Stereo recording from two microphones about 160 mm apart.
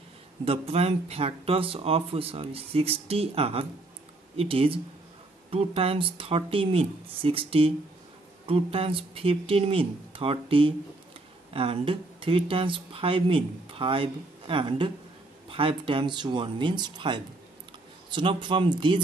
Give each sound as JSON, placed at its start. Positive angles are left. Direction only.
{"t": 0.5, "sound": "speech", "side_deg": -40}